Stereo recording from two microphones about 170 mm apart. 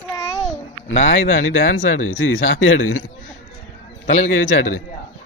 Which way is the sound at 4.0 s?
45° left (ahead or behind).